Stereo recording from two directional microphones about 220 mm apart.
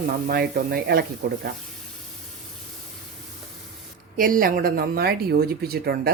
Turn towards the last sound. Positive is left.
turn(degrees=-45)  # may be behind; listen again after turning